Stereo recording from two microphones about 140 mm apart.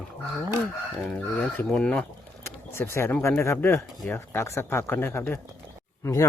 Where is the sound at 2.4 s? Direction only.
20° left (ahead or behind).